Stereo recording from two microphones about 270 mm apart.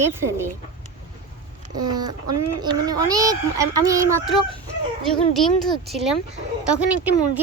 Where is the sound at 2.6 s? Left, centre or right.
Centre.